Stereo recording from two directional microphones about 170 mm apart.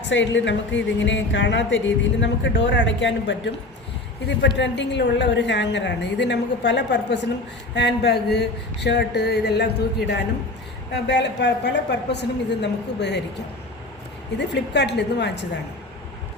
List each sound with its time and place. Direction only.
0.1 s a woman's voice: 90° left
14.3 s a woman's voice: 90° left